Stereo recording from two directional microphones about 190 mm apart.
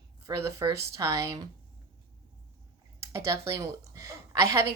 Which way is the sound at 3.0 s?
15° right (ahead or behind).